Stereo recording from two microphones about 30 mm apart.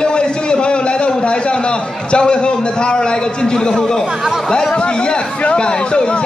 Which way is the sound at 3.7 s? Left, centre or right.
Centre.